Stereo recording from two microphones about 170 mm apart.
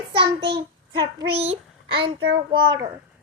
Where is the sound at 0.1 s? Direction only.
30° right (ahead or behind).